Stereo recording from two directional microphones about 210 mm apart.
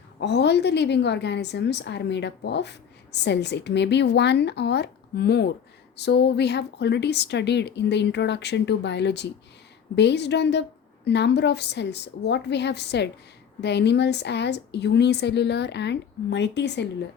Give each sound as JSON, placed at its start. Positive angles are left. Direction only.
{"t": 0.2, "sound": "a woman's voice", "side_deg": 55}